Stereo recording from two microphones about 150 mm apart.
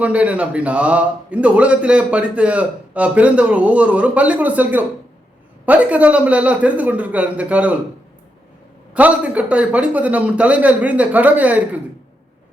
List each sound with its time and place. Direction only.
0.0 s speech: 10° right (ahead or behind)
8.9 s speech: 10° right (ahead or behind)